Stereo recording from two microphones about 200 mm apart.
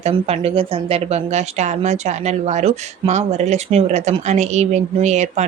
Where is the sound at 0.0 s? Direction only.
30° right (ahead or behind).